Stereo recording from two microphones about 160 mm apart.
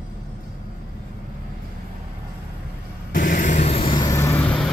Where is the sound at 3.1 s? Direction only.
60° left (ahead or behind); by 4.4 s 20° left (ahead or behind).